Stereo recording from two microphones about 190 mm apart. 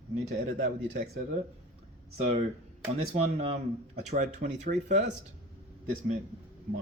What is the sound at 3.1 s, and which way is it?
Speech, 35° right (ahead or behind).